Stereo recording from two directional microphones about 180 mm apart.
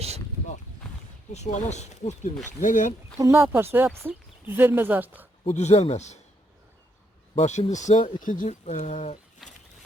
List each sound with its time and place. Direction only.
1.3 s speech: 40° left (ahead or behind)
3.2 s speech: 15° right (ahead or behind)
5.5 s speech: 40° left (ahead or behind)
7.3 s speech: 35° left (ahead or behind)
9.4 s a sound: centre (ahead or behind)